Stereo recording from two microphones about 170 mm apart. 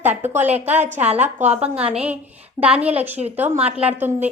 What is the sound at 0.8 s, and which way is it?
Speech, 45° right (ahead or behind).